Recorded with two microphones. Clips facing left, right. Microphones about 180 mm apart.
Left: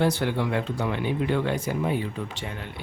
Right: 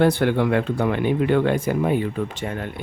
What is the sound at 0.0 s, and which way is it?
Speech, 60° right (ahead or behind).